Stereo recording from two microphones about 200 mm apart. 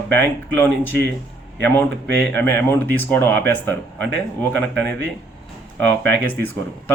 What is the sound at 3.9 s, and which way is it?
Speech, 65° right (ahead or behind).